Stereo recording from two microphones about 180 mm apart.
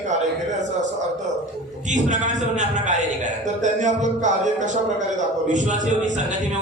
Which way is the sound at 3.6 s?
40° right (ahead or behind).